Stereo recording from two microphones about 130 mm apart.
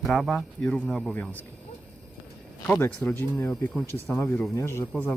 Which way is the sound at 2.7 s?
20° left (ahead or behind).